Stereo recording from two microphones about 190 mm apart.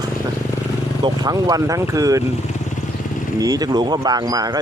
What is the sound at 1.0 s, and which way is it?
Speech, 20° right (ahead or behind).